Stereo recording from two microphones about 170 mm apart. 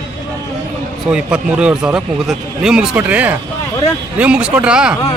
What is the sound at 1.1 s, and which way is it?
Speech, 5° right (ahead or behind).